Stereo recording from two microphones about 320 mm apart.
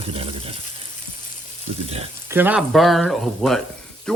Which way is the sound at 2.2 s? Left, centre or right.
Centre.